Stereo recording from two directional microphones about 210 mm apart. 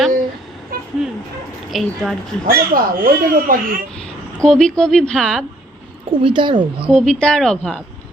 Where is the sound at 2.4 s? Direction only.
45° right (ahead or behind).